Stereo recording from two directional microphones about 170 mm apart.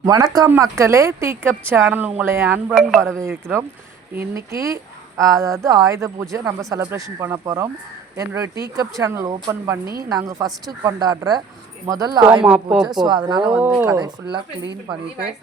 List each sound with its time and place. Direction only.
0.0 s a woman's voice: 20° right (ahead or behind)
2.7 s a woman's voice: centre (ahead or behind)
3.2 s a woman's voice: 15° right (ahead or behind)
12.3 s a woman's voice: 5° right (ahead or behind)
13.1 s speech: 25° right (ahead or behind)
13.5 s a woman's voice: 10° right (ahead or behind)